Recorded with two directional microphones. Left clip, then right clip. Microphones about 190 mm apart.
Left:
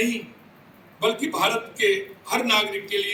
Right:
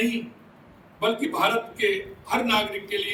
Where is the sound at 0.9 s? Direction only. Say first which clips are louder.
Left 1 dB; 35° right (ahead or behind).